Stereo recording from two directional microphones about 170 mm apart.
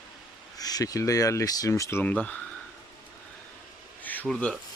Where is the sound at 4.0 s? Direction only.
10° left (ahead or behind).